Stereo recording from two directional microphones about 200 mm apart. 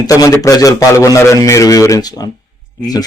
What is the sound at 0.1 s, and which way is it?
A man's voice, 15° left (ahead or behind).